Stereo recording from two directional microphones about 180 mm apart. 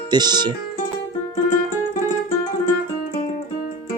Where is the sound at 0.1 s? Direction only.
25° right (ahead or behind).